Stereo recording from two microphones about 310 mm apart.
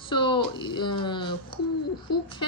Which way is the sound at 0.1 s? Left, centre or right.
Centre.